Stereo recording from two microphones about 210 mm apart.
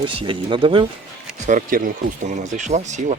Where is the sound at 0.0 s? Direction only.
25° right (ahead or behind).